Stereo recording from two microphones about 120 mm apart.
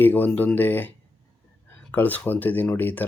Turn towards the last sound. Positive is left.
turn(degrees=15)  # may be behind; listen again after turning